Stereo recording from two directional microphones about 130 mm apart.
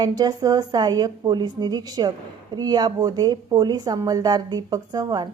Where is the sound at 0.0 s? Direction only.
30° right (ahead or behind).